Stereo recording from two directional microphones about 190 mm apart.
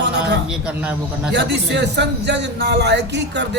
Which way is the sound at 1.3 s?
65° right (ahead or behind).